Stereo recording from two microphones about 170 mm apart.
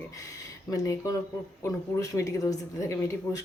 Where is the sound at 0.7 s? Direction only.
20° left (ahead or behind).